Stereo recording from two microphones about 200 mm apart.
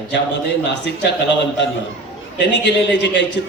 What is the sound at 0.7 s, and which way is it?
Speech, 60° left (ahead or behind).